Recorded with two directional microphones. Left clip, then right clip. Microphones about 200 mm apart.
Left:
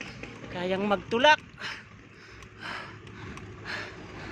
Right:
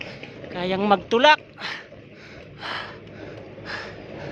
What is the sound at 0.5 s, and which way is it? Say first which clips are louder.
Speech: right 7 dB; 40° right (ahead or behind).